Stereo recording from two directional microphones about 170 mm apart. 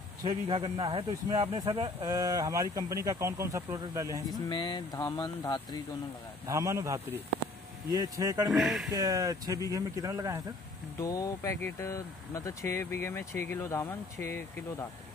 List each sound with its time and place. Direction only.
0.3 s speech: 30° right (ahead or behind)
2.0 s speech: 20° right (ahead or behind)
4.5 s speech: 25° left (ahead or behind)
6.4 s speech: 20° right (ahead or behind)
8.5 s speech: centre (ahead or behind)
8.9 s speech: 20° right (ahead or behind)
11.0 s speech: 20° left (ahead or behind)